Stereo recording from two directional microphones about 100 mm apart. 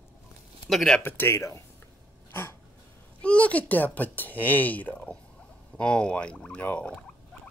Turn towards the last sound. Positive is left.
turn(degrees=10)  # may be behind; listen again after turning